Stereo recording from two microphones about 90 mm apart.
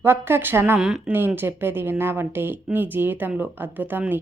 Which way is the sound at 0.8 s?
5° right (ahead or behind).